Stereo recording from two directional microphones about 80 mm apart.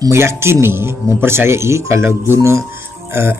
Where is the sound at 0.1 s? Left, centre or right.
Right.